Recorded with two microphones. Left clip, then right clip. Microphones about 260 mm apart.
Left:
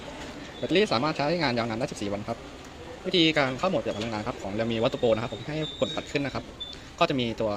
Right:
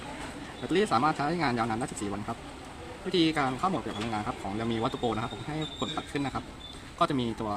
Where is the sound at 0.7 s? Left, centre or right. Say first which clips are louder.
Left 1 dB; centre.